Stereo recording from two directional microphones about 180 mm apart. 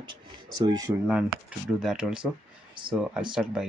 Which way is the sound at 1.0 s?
5° right (ahead or behind).